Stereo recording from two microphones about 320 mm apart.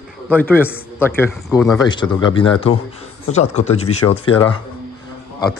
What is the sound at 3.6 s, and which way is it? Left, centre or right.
Speech, left.